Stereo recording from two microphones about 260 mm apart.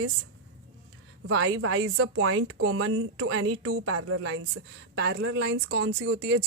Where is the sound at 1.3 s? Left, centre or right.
Right.